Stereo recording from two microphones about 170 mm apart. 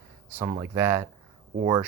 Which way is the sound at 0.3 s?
15° right (ahead or behind).